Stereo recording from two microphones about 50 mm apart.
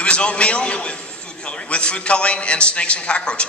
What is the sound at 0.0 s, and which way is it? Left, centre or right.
A man's voice, left.